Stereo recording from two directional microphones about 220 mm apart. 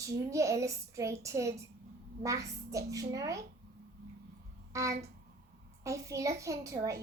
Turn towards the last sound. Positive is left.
turn(degrees=-15)  # may be behind; listen again after turning